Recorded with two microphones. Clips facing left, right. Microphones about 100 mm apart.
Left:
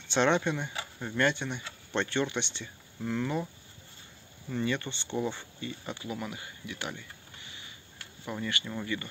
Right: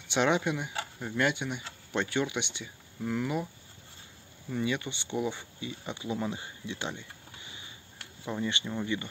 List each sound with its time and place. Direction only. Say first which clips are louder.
0.1 s speech: left 1 dB; 5° right (ahead or behind)
4.5 s speech: even; 10° right (ahead or behind)